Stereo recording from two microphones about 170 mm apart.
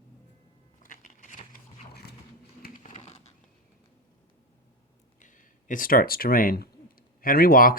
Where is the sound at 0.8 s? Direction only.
50° left (ahead or behind).